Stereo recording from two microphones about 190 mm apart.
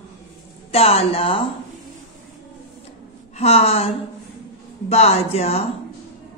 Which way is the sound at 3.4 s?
35° left (ahead or behind).